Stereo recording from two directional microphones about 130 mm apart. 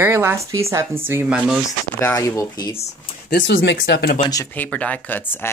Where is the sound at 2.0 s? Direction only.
20° left (ahead or behind).